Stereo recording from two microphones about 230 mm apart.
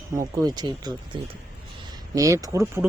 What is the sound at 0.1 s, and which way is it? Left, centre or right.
Speech, centre.